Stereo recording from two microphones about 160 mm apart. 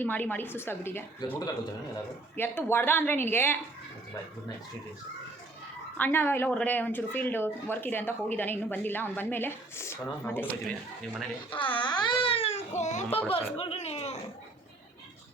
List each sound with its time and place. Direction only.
0.0 s speech: 10° left (ahead or behind)
6.0 s speech: 10° left (ahead or behind)
11.5 s speech: 30° left (ahead or behind)